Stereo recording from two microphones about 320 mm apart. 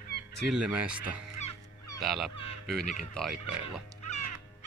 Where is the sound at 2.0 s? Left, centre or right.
Centre.